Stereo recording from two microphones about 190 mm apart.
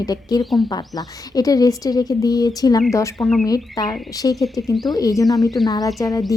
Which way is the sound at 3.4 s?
20° left (ahead or behind).